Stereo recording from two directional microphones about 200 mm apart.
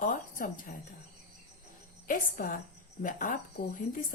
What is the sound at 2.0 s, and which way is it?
A woman's voice, 45° left (ahead or behind).